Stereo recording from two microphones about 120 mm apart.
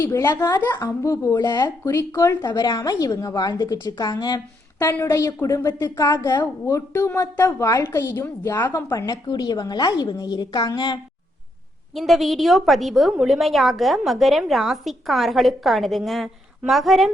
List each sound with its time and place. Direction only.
0.0 s a woman's voice: 25° left (ahead or behind)
4.9 s a woman's voice: 20° left (ahead or behind)
8.9 s a woman's voice: 35° left (ahead or behind)
11.9 s a woman's voice: centre (ahead or behind)